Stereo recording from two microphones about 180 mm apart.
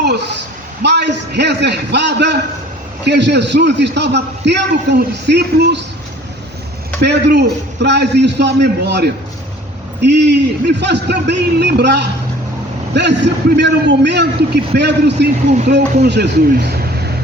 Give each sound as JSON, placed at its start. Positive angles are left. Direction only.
{"t": 0.0, "sound": "a sound", "side_deg": -70}
{"t": 0.8, "sound": "a man's voice", "side_deg": -70}
{"t": 7.0, "sound": "a man's voice", "side_deg": -70}
{"t": 15.4, "sound": "speech", "side_deg": -40}
{"t": 16.0, "sound": "a man's voice", "side_deg": -70}